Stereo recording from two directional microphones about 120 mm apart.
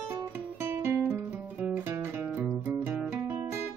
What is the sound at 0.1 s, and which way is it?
Guitar, 20° right (ahead or behind).